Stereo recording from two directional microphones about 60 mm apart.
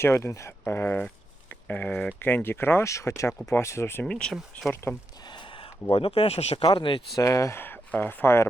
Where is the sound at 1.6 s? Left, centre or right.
Left.